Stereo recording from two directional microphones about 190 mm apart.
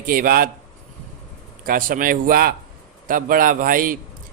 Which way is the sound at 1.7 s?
50° right (ahead or behind).